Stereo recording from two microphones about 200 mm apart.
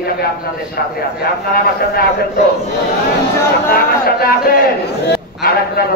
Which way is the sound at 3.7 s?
50° left (ahead or behind).